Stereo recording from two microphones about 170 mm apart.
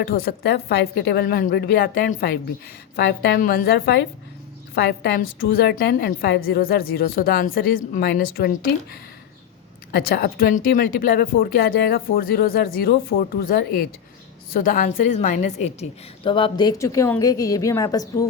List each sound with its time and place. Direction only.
0.1 s speech: 65° left (ahead or behind)
2.9 s a woman's voice: 70° left (ahead or behind)
9.9 s a woman's voice: 65° left (ahead or behind); by 18.3 s 20° left (ahead or behind)